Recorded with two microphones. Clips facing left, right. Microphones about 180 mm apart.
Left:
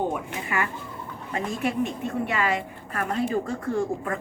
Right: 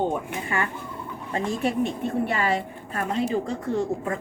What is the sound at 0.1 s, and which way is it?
A woman's voice, 30° right (ahead or behind).